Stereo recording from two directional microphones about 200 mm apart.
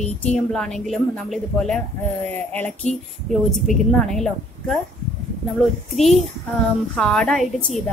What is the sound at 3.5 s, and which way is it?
A woman's voice, centre (ahead or behind).